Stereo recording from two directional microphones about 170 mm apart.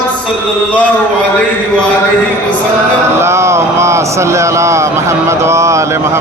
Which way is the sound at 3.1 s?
15° right (ahead or behind).